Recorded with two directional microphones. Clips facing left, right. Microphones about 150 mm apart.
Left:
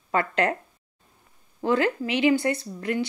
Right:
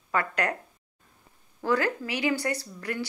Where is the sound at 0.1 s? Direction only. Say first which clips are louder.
Left 4 dB; 25° left (ahead or behind).